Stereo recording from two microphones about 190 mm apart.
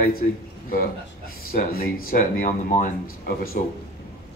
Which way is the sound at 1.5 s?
50° left (ahead or behind).